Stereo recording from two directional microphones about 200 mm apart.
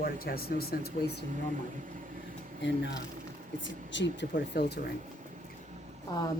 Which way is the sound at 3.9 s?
60° left (ahead or behind).